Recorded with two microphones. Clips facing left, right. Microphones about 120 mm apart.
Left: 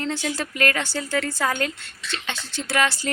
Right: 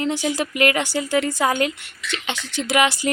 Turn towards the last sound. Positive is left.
turn(degrees=-15)  # may be behind; listen again after turning